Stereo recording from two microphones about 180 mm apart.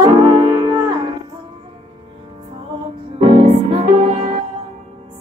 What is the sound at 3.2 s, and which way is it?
Music, 30° right (ahead or behind).